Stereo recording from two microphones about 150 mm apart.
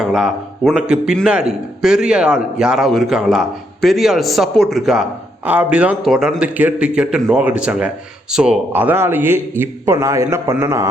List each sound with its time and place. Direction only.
0.0 s a man's voice: centre (ahead or behind); by 10.8 s 20° right (ahead or behind)